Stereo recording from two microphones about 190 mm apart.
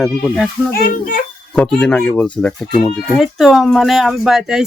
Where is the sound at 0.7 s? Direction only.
50° left (ahead or behind).